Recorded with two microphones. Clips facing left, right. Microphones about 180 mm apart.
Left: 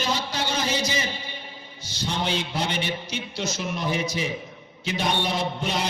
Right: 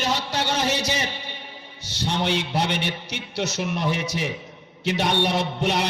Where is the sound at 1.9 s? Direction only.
65° right (ahead or behind).